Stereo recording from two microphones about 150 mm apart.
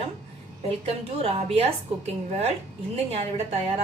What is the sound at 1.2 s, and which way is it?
Speech, 45° right (ahead or behind).